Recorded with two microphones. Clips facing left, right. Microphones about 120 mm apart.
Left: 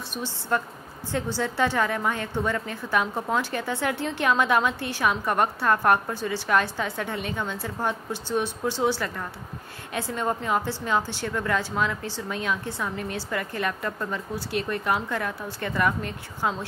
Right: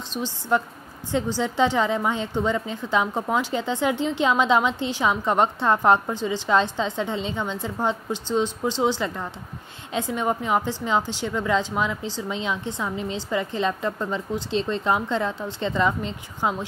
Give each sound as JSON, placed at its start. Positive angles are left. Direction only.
{"t": 0.5, "sound": "a woman's voice", "side_deg": -20}